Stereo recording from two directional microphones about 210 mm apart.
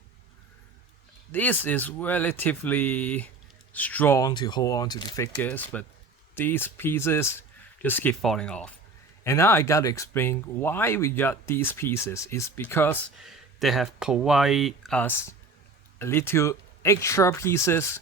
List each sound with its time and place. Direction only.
1.3 s speech: 10° left (ahead or behind)
13.2 s speech: centre (ahead or behind)